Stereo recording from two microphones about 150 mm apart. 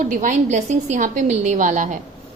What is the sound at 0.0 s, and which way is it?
A woman's voice, 60° right (ahead or behind).